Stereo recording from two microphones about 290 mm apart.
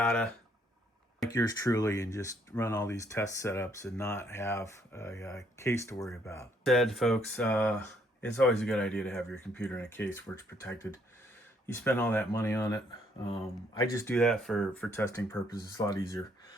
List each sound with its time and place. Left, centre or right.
0.0 s speech: centre
1.3 s speech: centre
11.6 s speech: centre